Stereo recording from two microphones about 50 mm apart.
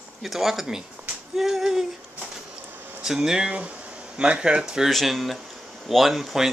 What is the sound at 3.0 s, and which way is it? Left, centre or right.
Speech, centre.